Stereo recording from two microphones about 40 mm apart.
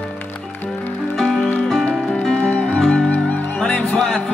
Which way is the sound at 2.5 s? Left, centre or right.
Left.